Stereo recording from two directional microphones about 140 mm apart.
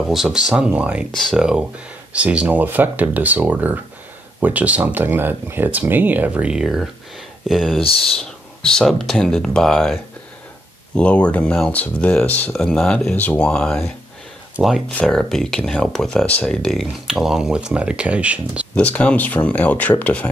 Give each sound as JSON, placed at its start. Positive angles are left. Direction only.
{"t": 0.0, "sound": "speech", "side_deg": 0}
{"t": 7.8, "sound": "speech", "side_deg": 40}
{"t": 8.2, "sound": "speech", "side_deg": 5}
{"t": 11.0, "sound": "speech", "side_deg": 10}
{"t": 14.9, "sound": "speech", "side_deg": 5}
{"t": 18.8, "sound": "speech", "side_deg": 10}